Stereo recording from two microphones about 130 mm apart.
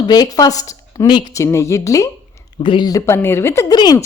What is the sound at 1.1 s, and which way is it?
Speech, 40° left (ahead or behind).